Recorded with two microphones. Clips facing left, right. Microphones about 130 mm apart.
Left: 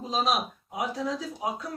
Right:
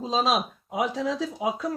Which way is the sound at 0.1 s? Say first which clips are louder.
Right 2 dB; 90° right.